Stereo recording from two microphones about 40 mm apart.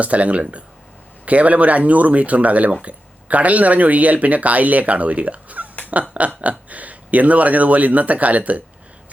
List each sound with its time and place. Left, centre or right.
0.0 s speech: right